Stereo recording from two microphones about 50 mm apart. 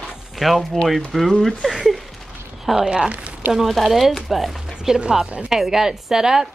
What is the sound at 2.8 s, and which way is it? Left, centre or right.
Speech, centre.